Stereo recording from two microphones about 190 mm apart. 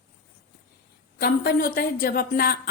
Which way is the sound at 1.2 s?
55° left (ahead or behind).